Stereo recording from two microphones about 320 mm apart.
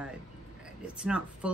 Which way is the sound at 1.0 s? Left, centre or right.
Centre.